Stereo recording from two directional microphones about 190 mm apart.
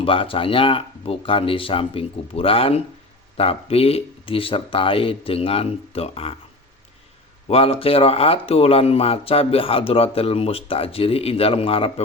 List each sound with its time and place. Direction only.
0.0 s speech: 30° left (ahead or behind)
7.4 s speech: 30° left (ahead or behind)